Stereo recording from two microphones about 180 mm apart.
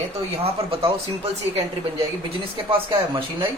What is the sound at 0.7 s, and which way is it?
Speech, 30° right (ahead or behind).